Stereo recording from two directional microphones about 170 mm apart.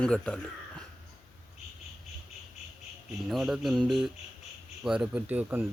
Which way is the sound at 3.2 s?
Centre (ahead or behind).